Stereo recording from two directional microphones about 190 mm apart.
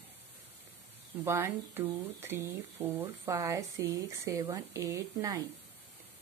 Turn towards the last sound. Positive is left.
turn(degrees=-15)  # may be behind; listen again after turning